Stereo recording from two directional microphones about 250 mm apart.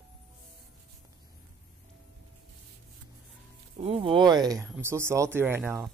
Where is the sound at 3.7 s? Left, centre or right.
Right.